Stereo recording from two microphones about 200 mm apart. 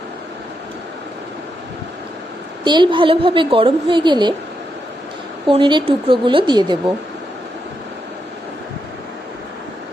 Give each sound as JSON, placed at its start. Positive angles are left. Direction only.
{"t": 2.6, "sound": "a woman's voice", "side_deg": -25}
{"t": 5.5, "sound": "a woman's voice", "side_deg": -25}